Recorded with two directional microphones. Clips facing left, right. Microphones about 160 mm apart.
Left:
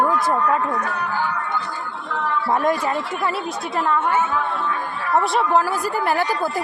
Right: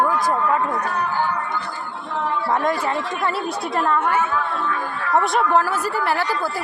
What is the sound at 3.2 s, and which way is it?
Speech, 5° left (ahead or behind).